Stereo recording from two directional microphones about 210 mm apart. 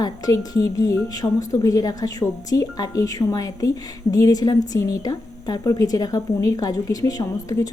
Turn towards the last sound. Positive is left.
turn(degrees=15)  # may be behind; listen again after turning